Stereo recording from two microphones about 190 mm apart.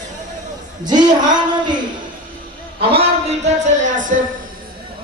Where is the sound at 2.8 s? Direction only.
30° right (ahead or behind).